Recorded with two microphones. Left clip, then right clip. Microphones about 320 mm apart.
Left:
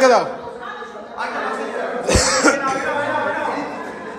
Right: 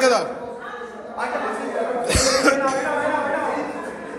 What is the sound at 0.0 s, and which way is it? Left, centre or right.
Speech, left.